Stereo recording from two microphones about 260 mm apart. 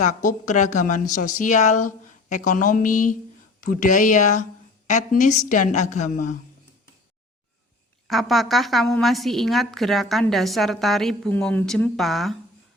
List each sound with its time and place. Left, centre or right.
0.0 s speech: left
8.0 s a woman's voice: centre